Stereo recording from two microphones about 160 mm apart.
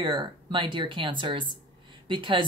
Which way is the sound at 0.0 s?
30° right (ahead or behind).